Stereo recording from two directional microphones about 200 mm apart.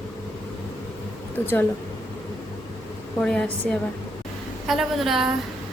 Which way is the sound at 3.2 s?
5° left (ahead or behind).